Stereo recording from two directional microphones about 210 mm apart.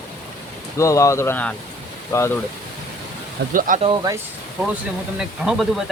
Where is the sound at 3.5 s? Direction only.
40° right (ahead or behind).